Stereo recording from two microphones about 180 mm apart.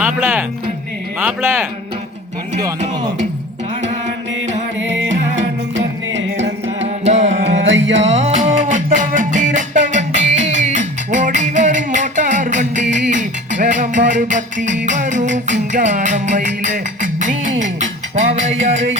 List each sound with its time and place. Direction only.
0.0 s speech: 10° right (ahead or behind)
5.4 s music: 90° right
6.8 s music: 40° right (ahead or behind)
7.7 s music: 90° right
8.0 s music: 40° right (ahead or behind)